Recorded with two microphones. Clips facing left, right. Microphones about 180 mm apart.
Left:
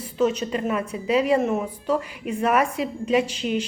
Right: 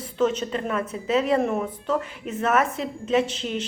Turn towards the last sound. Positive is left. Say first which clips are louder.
# left 1 dB
turn(degrees=10)  # may be behind; listen again after turning